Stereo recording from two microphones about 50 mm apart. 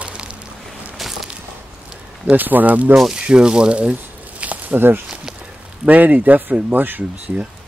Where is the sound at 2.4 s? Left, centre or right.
Right.